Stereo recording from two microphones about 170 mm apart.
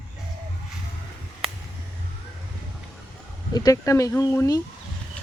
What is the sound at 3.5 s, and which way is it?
Speech, 20° left (ahead or behind).